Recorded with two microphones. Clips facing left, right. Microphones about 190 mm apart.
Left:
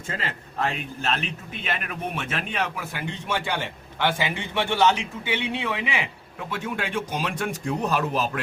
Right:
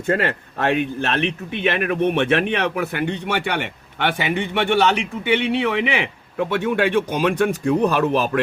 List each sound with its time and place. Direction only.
0.1 s a man's voice: 65° right (ahead or behind)